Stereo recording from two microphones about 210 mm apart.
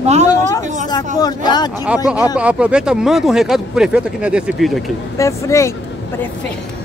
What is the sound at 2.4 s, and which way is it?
Speech, 5° right (ahead or behind).